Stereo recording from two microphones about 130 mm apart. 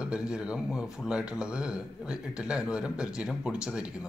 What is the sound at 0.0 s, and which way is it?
Speech, 5° right (ahead or behind).